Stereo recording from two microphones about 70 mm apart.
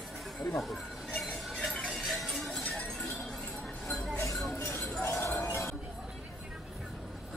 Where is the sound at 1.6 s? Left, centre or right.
Centre.